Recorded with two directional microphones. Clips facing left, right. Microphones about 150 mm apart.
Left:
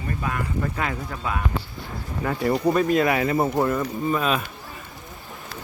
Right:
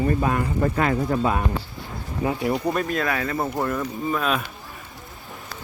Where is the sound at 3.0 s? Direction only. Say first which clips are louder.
Left 4 dB; 20° left (ahead or behind).